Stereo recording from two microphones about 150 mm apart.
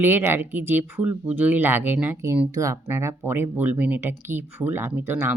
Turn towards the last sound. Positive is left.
turn(degrees=-15)  # may be behind; listen again after turning